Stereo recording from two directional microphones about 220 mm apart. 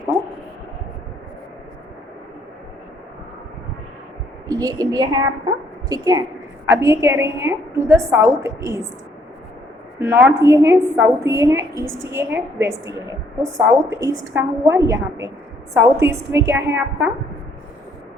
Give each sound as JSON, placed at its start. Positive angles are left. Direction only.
{"t": 4.4, "sound": "a woman's voice", "side_deg": -15}
{"t": 10.0, "sound": "a woman's voice", "side_deg": -10}